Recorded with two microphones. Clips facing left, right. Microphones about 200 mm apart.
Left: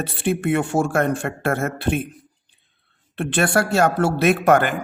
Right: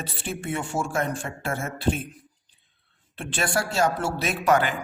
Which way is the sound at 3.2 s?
60° left (ahead or behind).